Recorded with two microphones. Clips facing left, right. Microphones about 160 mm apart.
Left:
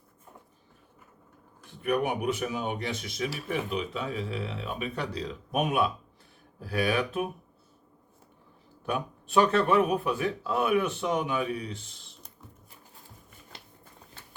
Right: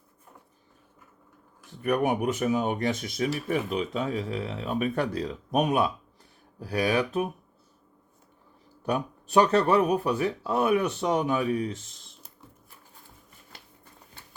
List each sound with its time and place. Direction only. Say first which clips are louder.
1.8 s speech: right 3 dB; 45° right (ahead or behind)
8.9 s speech: right 4 dB; 40° right (ahead or behind)